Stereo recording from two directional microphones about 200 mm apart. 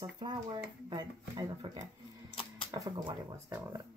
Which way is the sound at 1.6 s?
25° right (ahead or behind).